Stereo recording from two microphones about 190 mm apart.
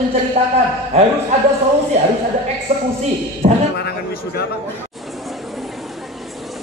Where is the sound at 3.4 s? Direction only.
45° right (ahead or behind).